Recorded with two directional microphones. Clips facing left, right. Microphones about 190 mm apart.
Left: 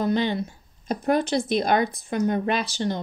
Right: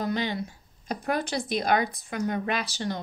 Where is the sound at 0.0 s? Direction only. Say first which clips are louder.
Left 5 dB; 25° left (ahead or behind).